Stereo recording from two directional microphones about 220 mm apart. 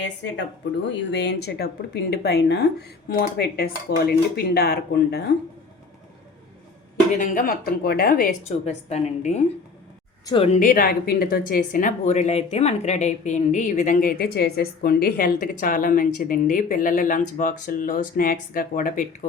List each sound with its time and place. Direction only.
0.9 s speech: 50° left (ahead or behind)
7.2 s speech: 40° left (ahead or behind)